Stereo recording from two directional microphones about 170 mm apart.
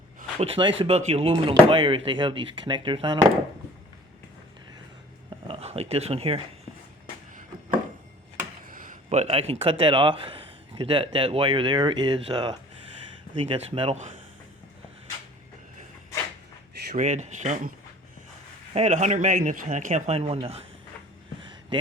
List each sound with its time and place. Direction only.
0.3 s speech: 35° right (ahead or behind)
5.5 s speech: 35° right (ahead or behind)
8.6 s a man's voice: 50° right (ahead or behind); by 12.5 s 25° right (ahead or behind)
13.3 s speech: 35° right (ahead or behind)
16.7 s a sound: 70° right (ahead or behind)
17.0 s a man's voice: 45° right (ahead or behind)
18.7 s a man's voice: 45° right (ahead or behind)